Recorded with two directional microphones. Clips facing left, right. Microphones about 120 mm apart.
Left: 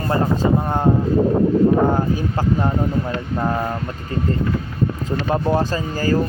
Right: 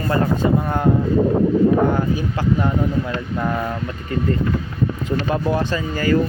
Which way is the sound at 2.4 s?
35° left (ahead or behind).